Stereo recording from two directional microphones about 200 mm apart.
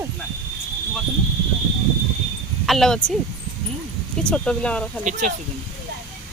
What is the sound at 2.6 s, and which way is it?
Speech, centre (ahead or behind).